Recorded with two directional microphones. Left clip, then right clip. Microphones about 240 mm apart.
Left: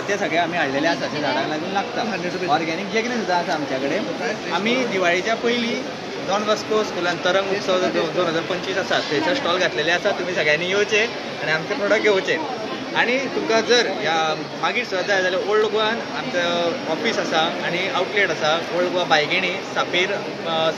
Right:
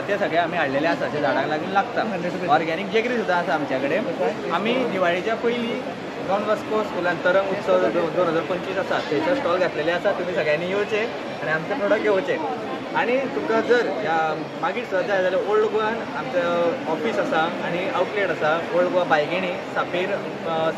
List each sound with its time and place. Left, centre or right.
0.1 s speech: centre
2.5 s speech: centre
4.6 s speech: centre
7.2 s speech: centre
9.5 s speech: centre
17.9 s speech: centre